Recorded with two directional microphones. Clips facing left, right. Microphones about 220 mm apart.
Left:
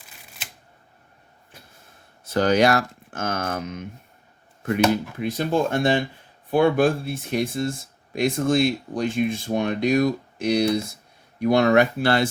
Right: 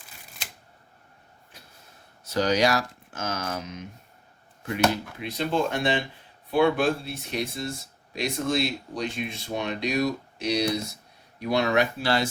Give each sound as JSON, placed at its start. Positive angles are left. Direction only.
{"t": 2.2, "sound": "speech", "side_deg": 55}
{"t": 5.2, "sound": "speech", "side_deg": 50}